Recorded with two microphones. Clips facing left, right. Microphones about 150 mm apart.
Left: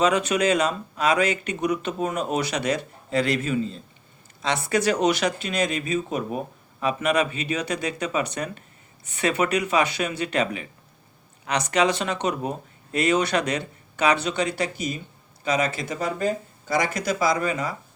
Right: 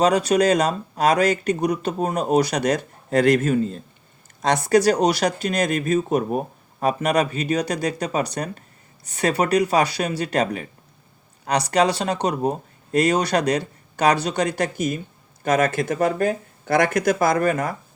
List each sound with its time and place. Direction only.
0.0 s speech: 35° right (ahead or behind)